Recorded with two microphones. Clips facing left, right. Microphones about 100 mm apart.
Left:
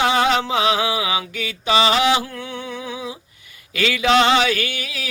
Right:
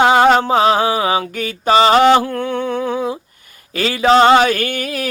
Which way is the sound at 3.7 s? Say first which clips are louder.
Right 4 dB; 40° right (ahead or behind).